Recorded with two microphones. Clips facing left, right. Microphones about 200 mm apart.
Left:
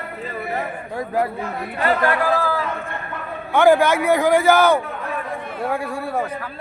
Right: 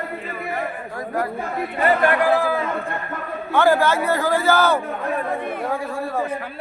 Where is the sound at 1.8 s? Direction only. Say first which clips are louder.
Right 1 dB; 15° right (ahead or behind).